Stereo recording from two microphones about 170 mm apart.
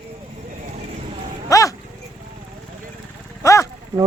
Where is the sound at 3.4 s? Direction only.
15° left (ahead or behind).